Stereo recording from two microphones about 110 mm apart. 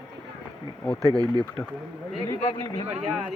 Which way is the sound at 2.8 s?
80° right.